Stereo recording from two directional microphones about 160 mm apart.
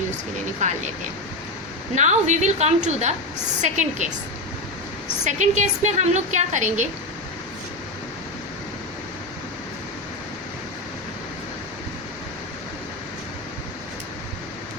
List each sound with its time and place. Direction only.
0.6 s a woman's voice: 50° right (ahead or behind)
2.0 s a woman's voice: 45° right (ahead or behind)
5.2 s a woman's voice: 45° right (ahead or behind)